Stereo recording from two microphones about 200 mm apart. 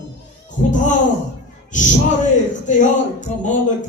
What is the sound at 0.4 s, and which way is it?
Music, 40° left (ahead or behind).